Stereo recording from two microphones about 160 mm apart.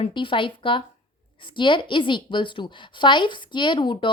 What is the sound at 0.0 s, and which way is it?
A woman's voice, 30° left (ahead or behind).